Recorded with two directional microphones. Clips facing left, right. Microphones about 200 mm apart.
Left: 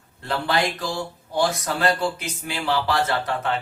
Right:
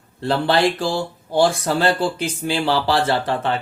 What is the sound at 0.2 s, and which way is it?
Speech, 30° right (ahead or behind).